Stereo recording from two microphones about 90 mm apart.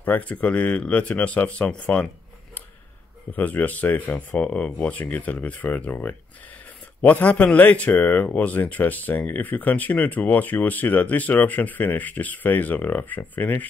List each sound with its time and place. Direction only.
0.0 s speech: 15° left (ahead or behind)
3.3 s speech: 20° left (ahead or behind)